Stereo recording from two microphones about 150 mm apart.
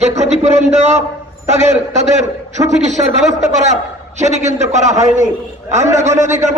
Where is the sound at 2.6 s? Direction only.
50° right (ahead or behind).